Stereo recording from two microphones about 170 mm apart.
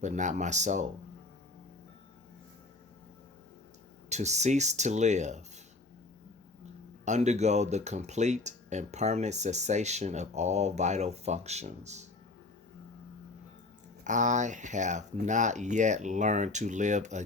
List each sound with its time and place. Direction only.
0.0 s speech: 45° right (ahead or behind)
4.1 s speech: 40° right (ahead or behind)
7.0 s speech: 45° right (ahead or behind)
14.0 s speech: 45° right (ahead or behind)